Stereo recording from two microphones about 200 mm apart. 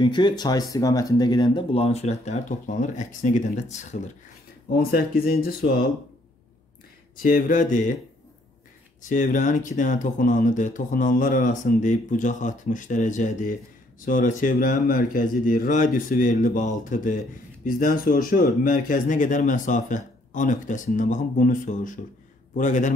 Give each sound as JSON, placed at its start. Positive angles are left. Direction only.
{"t": 0.0, "sound": "speech", "side_deg": 20}
{"t": 4.7, "sound": "speech", "side_deg": 50}
{"t": 7.2, "sound": "speech", "side_deg": 40}
{"t": 9.1, "sound": "a man's voice", "side_deg": 40}